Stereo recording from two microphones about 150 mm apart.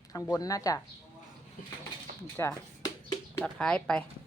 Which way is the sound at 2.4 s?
25° left (ahead or behind).